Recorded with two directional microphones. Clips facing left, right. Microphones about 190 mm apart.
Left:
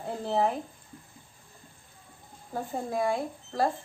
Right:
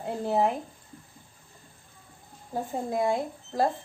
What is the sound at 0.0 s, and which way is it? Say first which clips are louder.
Speech: right 2 dB; 15° right (ahead or behind).